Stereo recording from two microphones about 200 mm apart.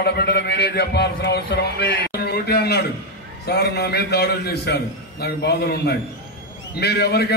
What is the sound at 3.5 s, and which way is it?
A man's voice, 55° left (ahead or behind).